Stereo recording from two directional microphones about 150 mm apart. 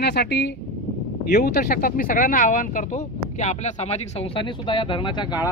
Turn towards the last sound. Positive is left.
turn(degrees=30)  # may be behind; listen again after turning